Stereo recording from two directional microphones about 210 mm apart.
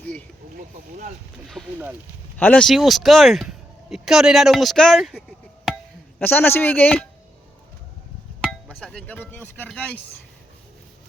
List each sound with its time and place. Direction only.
0.5 s speech: 40° right (ahead or behind)
1.5 s speech: 5° right (ahead or behind)
8.4 s speech: centre (ahead or behind)